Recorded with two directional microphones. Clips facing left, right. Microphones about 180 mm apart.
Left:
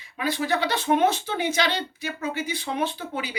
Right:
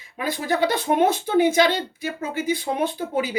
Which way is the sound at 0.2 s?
50° right (ahead or behind).